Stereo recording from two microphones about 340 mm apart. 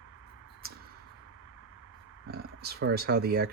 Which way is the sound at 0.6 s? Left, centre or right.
Right.